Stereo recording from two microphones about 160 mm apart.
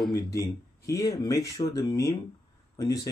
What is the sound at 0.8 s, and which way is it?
Speech, 20° left (ahead or behind).